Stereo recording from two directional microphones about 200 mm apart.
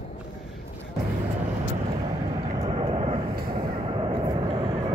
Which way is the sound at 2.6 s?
25° right (ahead or behind).